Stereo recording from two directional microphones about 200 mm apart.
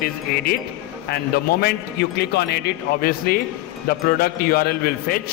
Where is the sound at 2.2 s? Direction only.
55° left (ahead or behind).